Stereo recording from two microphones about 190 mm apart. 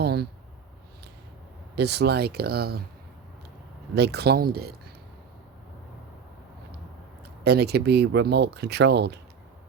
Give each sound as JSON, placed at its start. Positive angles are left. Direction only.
{"t": 0.0, "sound": "a sound", "side_deg": -60}
{"t": 1.7, "sound": "speech", "side_deg": -60}
{"t": 3.9, "sound": "speech", "side_deg": -60}
{"t": 7.4, "sound": "speech", "side_deg": -60}